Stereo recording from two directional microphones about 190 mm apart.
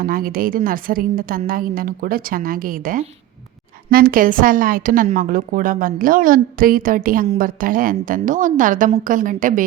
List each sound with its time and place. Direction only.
0.0 s a woman's voice: 50° right (ahead or behind)